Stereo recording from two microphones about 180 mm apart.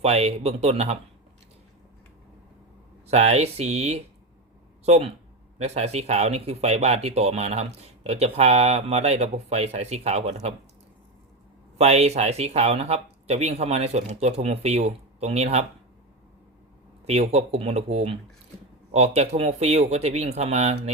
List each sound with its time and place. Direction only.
0.0 s speech: 35° right (ahead or behind)
3.1 s speech: 35° right (ahead or behind)
11.8 s speech: 35° right (ahead or behind)
17.1 s speech: 35° right (ahead or behind)